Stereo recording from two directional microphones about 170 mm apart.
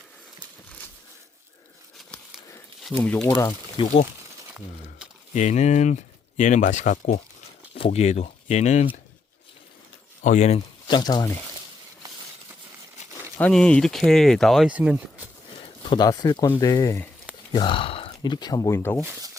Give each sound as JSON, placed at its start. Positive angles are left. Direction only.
{"t": 2.8, "sound": "speech", "side_deg": 5}
{"t": 3.2, "sound": "speech", "side_deg": 25}
{"t": 5.3, "sound": "speech", "side_deg": 45}
{"t": 10.2, "sound": "speech", "side_deg": 40}
{"t": 10.8, "sound": "speech", "side_deg": 25}
{"t": 12.0, "sound": "a sound", "side_deg": -20}
{"t": 13.4, "sound": "speech", "side_deg": 5}
{"t": 15.9, "sound": "speech", "side_deg": 25}
{"t": 17.5, "sound": "speech", "side_deg": 30}
{"t": 19.0, "sound": "speech", "side_deg": -15}